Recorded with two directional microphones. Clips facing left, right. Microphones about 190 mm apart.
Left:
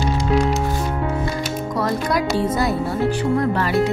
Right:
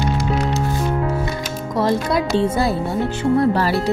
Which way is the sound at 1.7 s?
25° right (ahead or behind).